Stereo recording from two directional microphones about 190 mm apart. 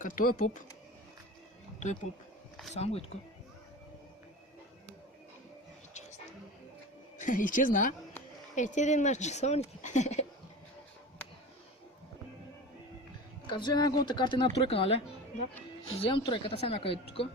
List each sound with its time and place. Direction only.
0.0 s speech: 45° left (ahead or behind)
2.7 s speech: 30° left (ahead or behind)
5.9 s music: 35° left (ahead or behind)
7.2 s speech: 45° left (ahead or behind)
13.5 s a woman's voice: 25° left (ahead or behind)
16.0 s a woman's voice: 25° left (ahead or behind)